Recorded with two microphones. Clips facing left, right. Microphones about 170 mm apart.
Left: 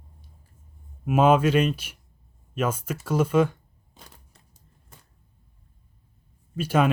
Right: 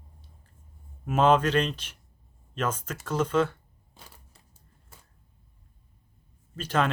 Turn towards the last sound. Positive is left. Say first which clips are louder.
# left 4 dB
turn(degrees=10)  # may be behind; listen again after turning